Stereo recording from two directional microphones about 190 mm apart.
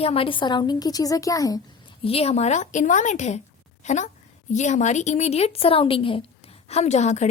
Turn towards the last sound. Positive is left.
turn(degrees=35)  # may be behind; listen again after turning